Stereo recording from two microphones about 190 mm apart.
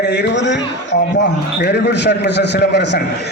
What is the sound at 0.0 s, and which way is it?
A man's voice, 65° left (ahead or behind).